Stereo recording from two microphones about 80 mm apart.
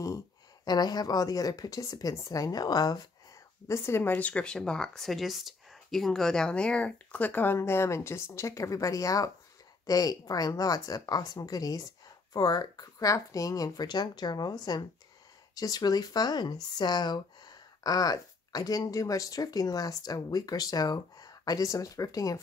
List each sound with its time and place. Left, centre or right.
0.7 s speech: left
3.6 s a woman's voice: left